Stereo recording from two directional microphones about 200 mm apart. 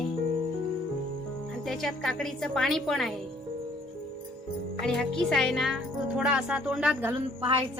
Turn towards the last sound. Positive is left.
turn(degrees=-30)  # may be behind; listen again after turning